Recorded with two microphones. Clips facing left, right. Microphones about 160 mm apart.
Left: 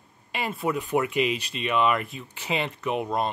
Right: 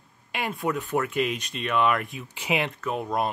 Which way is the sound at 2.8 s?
10° left (ahead or behind).